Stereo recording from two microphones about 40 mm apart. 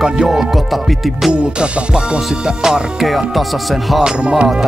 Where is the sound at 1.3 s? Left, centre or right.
Right.